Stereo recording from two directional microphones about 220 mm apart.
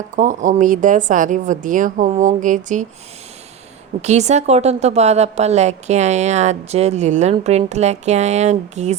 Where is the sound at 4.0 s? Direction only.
30° right (ahead or behind).